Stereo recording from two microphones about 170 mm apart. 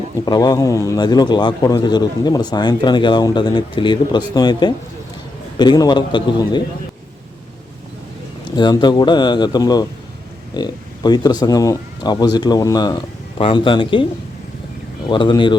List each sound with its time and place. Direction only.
0.3 s a man's voice: 25° left (ahead or behind)
8.5 s a man's voice: 25° left (ahead or behind)
15.1 s a man's voice: 30° left (ahead or behind)